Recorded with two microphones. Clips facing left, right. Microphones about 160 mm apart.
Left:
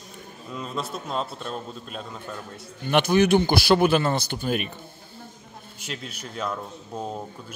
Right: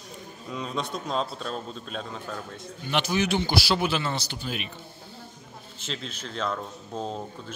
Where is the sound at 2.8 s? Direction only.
55° left (ahead or behind).